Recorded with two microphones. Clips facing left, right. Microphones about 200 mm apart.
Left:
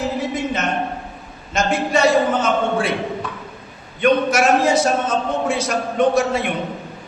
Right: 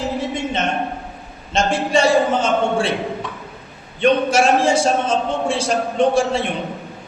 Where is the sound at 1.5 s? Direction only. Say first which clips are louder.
Right 1 dB; 30° right (ahead or behind).